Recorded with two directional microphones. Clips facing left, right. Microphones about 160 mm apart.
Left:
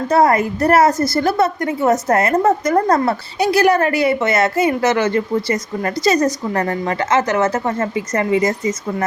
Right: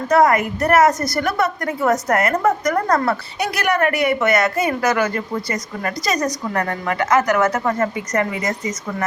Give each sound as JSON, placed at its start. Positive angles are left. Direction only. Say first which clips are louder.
{"t": 0.1, "sound": "a woman's voice", "louder": "even", "side_deg": 30}